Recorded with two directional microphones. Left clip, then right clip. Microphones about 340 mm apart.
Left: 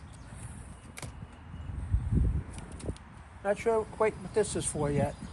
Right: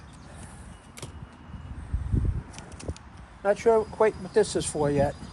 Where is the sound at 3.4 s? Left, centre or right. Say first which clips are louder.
Right 7 dB; right.